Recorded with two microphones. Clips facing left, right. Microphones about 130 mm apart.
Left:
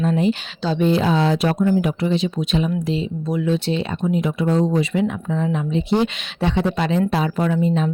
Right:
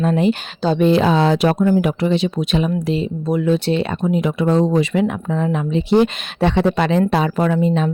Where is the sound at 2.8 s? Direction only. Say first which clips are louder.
Right 3 dB; 60° right (ahead or behind).